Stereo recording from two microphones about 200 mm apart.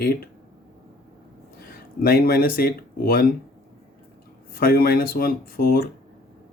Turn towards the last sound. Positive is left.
turn(degrees=50)  # may be behind; listen again after turning